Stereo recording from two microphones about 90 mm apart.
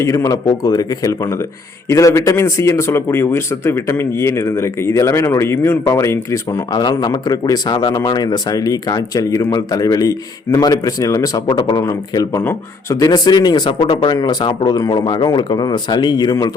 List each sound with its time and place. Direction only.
0.0 s a man's voice: 35° left (ahead or behind)
6.7 s a man's voice: 55° left (ahead or behind); by 14.1 s 75° left (ahead or behind)
14.2 s speech: 50° left (ahead or behind)